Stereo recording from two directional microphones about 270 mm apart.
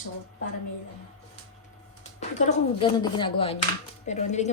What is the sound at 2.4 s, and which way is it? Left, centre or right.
Speech, centre.